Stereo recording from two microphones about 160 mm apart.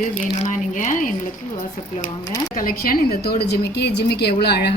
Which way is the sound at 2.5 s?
60° left (ahead or behind).